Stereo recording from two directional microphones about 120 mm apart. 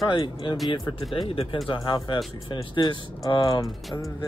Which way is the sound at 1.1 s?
50° left (ahead or behind).